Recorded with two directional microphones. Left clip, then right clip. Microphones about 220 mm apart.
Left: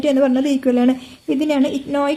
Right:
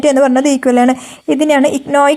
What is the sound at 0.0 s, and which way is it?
A woman's voice, 30° right (ahead or behind).